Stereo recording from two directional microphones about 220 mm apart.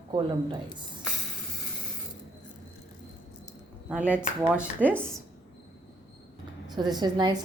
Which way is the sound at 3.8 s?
5° right (ahead or behind).